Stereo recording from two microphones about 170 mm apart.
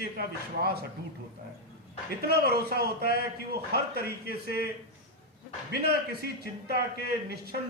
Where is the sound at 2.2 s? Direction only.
70° right (ahead or behind).